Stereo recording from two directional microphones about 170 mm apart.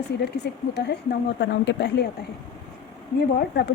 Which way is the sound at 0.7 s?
85° left.